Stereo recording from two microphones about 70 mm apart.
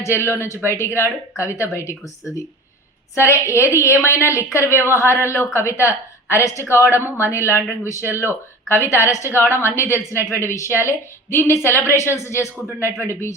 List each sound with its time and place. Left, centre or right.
0.0 s a woman's voice: left
3.2 s a woman's voice: left